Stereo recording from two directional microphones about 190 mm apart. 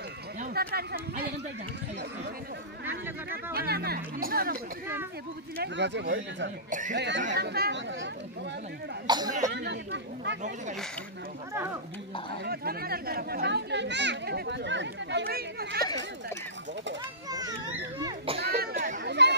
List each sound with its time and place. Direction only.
0.4 s speech: 55° right (ahead or behind)
3.5 s speech: 55° right (ahead or behind)
5.6 s speech: 65° right (ahead or behind)
7.3 s a child's voice: 55° right (ahead or behind)
9.0 s speech: 20° right (ahead or behind)
9.5 s a child's voice: 60° right (ahead or behind)
11.5 s speech: 15° right (ahead or behind)
12.4 s a child's voice: 55° right (ahead or behind)
17.3 s children playing: 20° right (ahead or behind)
18.4 s a sound: 55° right (ahead or behind)
19.0 s chatter: 65° right (ahead or behind)